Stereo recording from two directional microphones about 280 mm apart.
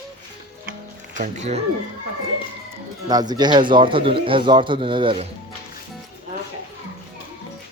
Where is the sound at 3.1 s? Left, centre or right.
Centre.